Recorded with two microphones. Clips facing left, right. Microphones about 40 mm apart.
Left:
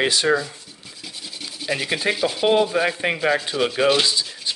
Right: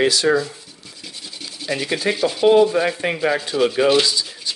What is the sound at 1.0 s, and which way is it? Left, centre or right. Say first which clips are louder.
Sanding: even; centre.